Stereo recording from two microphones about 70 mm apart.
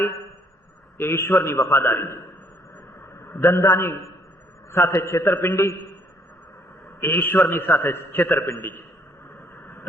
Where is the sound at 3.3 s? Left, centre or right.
Left.